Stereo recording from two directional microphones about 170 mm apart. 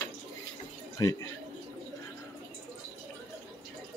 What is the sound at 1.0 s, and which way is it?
Speech, 20° left (ahead or behind).